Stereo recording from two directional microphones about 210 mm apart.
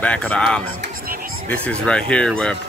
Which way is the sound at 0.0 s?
5° left (ahead or behind).